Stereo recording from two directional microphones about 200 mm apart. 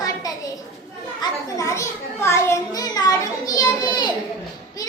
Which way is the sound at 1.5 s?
15° left (ahead or behind).